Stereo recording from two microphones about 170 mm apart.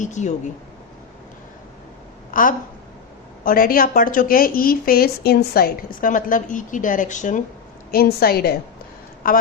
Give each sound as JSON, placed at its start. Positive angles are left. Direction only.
{"t": 0.0, "sound": "speech", "side_deg": 45}
{"t": 2.3, "sound": "a woman's voice", "side_deg": 50}
{"t": 7.9, "sound": "a woman's voice", "side_deg": 60}